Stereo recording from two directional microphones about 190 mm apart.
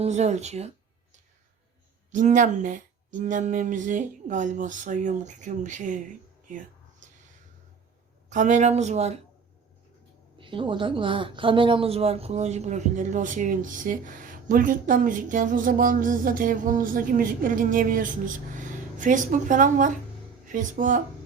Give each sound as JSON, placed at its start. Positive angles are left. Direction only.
{"t": 0.0, "sound": "speech", "side_deg": -35}
{"t": 2.1, "sound": "speech", "side_deg": -40}
{"t": 6.5, "sound": "a sound", "side_deg": -45}
{"t": 8.3, "sound": "speech", "side_deg": -40}
{"t": 10.3, "sound": "a woman's voice", "side_deg": -25}